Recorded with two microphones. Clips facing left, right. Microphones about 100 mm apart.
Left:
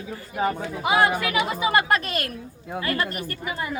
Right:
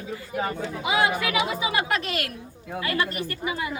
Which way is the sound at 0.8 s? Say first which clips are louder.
Left 3 dB; 50° left (ahead or behind).